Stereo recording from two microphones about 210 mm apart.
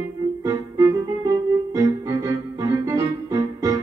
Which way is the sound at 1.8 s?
15° right (ahead or behind).